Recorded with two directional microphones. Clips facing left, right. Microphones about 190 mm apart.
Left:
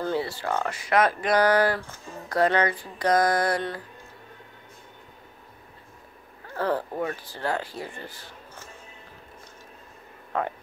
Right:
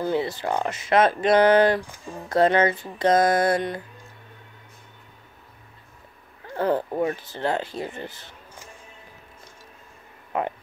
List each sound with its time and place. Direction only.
0.0 s speech: 20° right (ahead or behind)
6.5 s speech: 20° right (ahead or behind)